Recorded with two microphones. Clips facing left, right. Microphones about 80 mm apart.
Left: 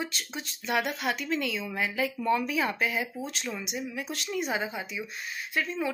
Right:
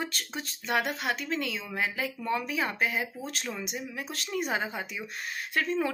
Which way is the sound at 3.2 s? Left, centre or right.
Right.